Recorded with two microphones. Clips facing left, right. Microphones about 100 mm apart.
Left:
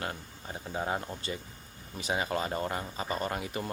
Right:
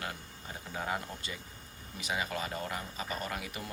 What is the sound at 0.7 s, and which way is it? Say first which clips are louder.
A man's voice: left 3 dB; 30° left (ahead or behind).